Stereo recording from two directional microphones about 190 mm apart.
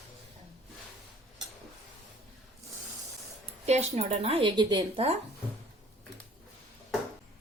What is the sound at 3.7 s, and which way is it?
A woman's voice, 35° right (ahead or behind).